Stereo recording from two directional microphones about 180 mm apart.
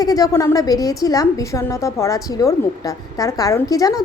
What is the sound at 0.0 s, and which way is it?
A woman's voice, 20° left (ahead or behind).